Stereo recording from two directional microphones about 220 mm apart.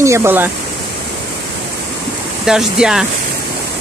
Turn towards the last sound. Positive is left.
turn(degrees=0)  # may be behind; listen again after turning